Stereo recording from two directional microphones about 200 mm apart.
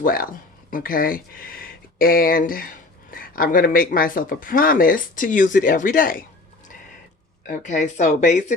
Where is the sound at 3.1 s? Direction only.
45° left (ahead or behind).